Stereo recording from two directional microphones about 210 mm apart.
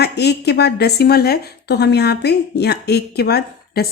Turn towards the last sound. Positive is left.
turn(degrees=50)  # may be behind; listen again after turning